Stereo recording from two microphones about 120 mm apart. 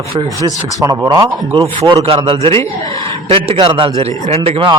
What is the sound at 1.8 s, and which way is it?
Speech, 50° right (ahead or behind).